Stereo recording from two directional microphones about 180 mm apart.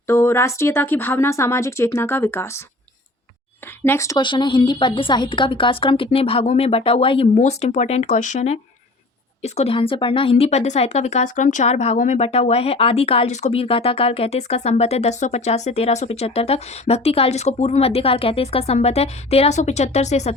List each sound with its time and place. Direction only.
0.1 s speech: 15° left (ahead or behind)
3.8 s speech: 15° left (ahead or behind); by 20.3 s 40° left (ahead or behind)